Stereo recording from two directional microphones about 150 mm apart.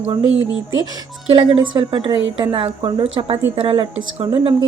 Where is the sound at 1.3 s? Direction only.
35° right (ahead or behind).